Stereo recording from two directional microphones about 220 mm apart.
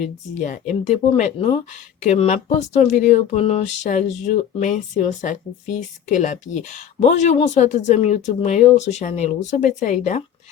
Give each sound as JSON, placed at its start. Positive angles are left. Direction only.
{"t": 0.0, "sound": "speech", "side_deg": 35}